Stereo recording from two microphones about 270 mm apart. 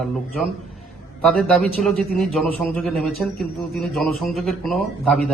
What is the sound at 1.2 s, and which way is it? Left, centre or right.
A man's voice, centre.